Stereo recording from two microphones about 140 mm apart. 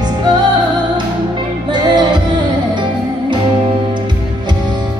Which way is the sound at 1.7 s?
30° right (ahead or behind).